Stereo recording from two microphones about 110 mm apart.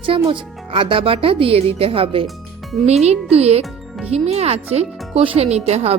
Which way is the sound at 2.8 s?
75° right (ahead or behind).